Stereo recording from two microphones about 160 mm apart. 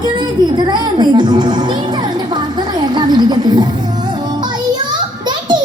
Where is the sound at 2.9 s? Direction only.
25° right (ahead or behind).